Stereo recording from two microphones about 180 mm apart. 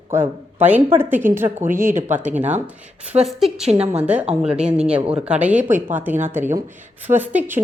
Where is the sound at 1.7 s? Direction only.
50° right (ahead or behind).